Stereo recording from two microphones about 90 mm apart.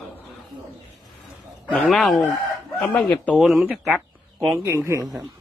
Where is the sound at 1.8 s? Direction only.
Centre (ahead or behind).